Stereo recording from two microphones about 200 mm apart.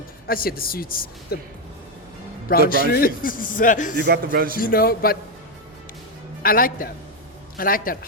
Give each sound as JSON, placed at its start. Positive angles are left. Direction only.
{"t": 0.3, "sound": "a man's voice", "side_deg": 45}
{"t": 2.5, "sound": "a man's voice", "side_deg": 45}
{"t": 4.0, "sound": "speech", "side_deg": -50}
{"t": 4.6, "sound": "a man's voice", "side_deg": 50}
{"t": 6.4, "sound": "a man's voice", "side_deg": 45}